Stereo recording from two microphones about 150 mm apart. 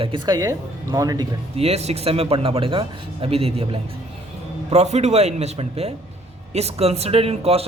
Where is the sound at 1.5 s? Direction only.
45° right (ahead or behind).